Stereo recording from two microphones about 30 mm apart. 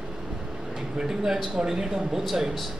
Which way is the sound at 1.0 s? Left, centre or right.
Centre.